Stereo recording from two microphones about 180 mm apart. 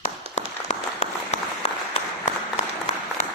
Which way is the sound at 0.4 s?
40° left (ahead or behind).